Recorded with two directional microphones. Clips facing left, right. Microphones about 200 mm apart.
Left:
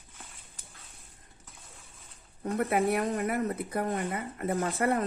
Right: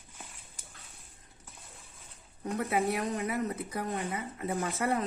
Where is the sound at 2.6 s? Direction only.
55° left (ahead or behind).